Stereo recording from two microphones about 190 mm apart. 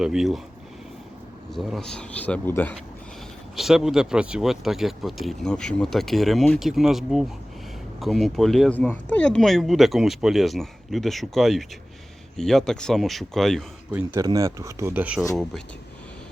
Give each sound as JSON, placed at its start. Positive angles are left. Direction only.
{"t": 0.0, "sound": "speech", "side_deg": 0}
{"t": 1.5, "sound": "speech", "side_deg": 0}
{"t": 3.5, "sound": "speech", "side_deg": 0}
{"t": 13.9, "sound": "speech", "side_deg": -10}